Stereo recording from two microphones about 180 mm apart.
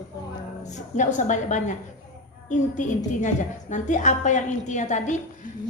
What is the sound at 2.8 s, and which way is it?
A woman's voice, 45° left (ahead or behind).